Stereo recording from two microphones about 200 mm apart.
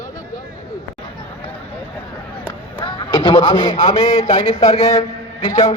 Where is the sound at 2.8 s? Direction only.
25° left (ahead or behind).